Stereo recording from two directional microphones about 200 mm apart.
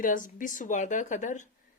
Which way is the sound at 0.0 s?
40° left (ahead or behind).